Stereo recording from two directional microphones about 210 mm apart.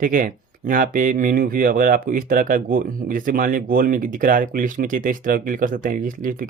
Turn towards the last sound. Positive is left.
turn(degrees=-40)  # may be behind; listen again after turning